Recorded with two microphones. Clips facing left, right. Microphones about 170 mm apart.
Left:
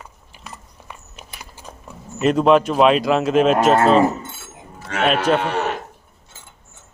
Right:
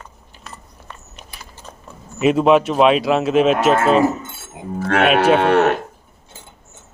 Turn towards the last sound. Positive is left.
turn(degrees=-65)  # may be behind; listen again after turning